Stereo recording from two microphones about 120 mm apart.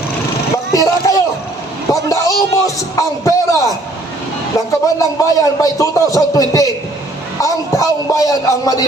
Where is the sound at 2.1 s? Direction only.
30° left (ahead or behind).